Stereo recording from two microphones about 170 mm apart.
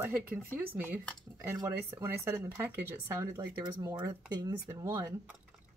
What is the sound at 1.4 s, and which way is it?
Speech, 15° right (ahead or behind).